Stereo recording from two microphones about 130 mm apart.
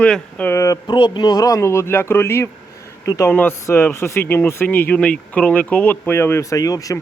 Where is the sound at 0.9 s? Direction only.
35° left (ahead or behind).